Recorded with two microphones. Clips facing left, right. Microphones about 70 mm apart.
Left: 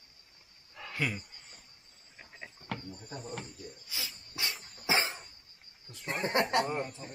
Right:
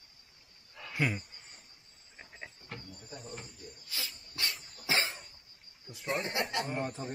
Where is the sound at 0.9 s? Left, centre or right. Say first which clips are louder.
Right 2 dB; centre.